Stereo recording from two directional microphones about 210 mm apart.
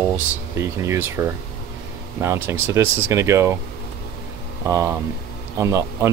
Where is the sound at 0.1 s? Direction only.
10° right (ahead or behind).